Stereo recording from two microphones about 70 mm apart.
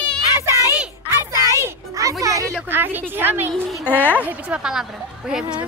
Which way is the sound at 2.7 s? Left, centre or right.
Right.